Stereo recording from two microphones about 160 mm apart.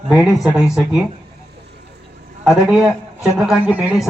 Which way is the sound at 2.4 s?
5° right (ahead or behind).